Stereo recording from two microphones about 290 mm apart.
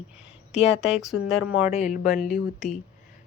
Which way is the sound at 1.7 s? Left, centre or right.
Left.